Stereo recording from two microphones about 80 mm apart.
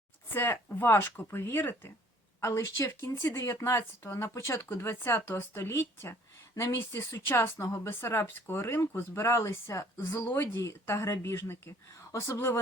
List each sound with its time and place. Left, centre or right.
0.3 s speech: left
2.4 s speech: left